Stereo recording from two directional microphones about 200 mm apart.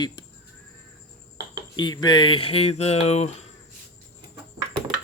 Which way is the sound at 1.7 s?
20° left (ahead or behind).